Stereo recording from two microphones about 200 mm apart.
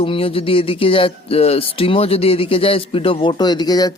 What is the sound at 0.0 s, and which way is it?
Speech, 25° left (ahead or behind).